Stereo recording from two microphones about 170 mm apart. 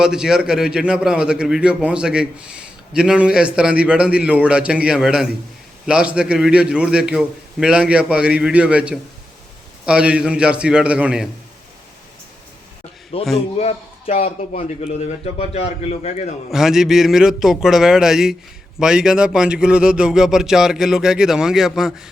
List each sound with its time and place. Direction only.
0.0 s a man's voice: 5° right (ahead or behind)
13.3 s a man's voice: 40° left (ahead or behind)
16.5 s a man's voice: centre (ahead or behind)